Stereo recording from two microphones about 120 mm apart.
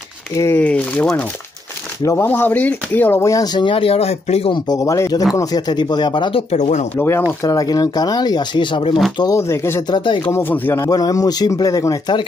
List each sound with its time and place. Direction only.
0.4 s speech: 15° left (ahead or behind); by 4.5 s 60° left (ahead or behind)
4.5 s speech: 35° left (ahead or behind)
6.5 s speech: 75° left (ahead or behind)
7.0 s speech: 20° left (ahead or behind)
7.4 s speech: 30° left (ahead or behind)
9.2 s speech: 25° left (ahead or behind)
9.8 s speech: 40° left (ahead or behind)
10.2 s speech: 20° left (ahead or behind)
10.8 s speech: 30° left (ahead or behind)